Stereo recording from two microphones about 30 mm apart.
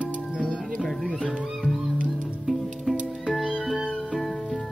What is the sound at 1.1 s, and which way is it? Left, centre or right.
Music, left.